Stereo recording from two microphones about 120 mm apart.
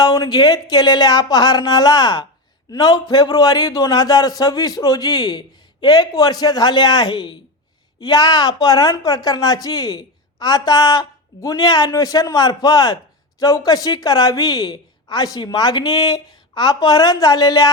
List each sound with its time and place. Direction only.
0.0 s a woman's voice: 30° left (ahead or behind)